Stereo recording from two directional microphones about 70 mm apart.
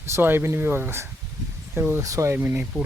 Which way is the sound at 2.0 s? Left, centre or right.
Right.